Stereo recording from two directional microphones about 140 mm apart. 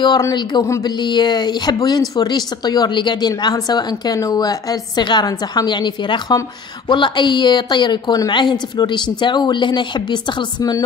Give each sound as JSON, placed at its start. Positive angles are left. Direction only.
{"t": 0.0, "sound": "a woman's voice", "side_deg": 30}